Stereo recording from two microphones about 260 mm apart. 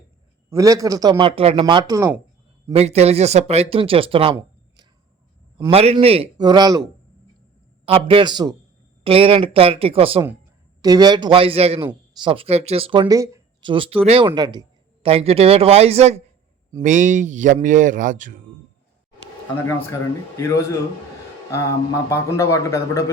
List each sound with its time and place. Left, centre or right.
0.5 s speech: centre
2.7 s speech: right
5.5 s speech: centre
7.9 s speech: right
19.6 s speech: centre
22.1 s speech: centre